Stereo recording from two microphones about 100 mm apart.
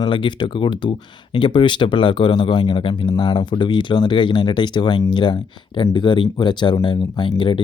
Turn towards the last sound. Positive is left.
turn(degrees=55)  # may be behind; listen again after turning